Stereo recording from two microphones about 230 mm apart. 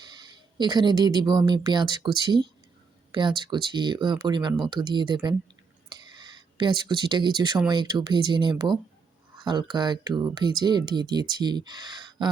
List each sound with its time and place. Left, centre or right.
0.0 s speech: centre